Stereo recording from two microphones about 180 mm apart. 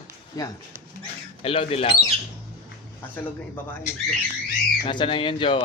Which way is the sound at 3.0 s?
10° left (ahead or behind).